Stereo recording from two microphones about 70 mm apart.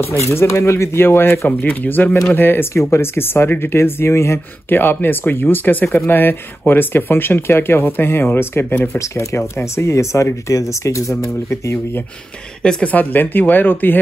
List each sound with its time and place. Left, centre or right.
0.0 s speech: left
8.8 s speech: left
12.6 s speech: left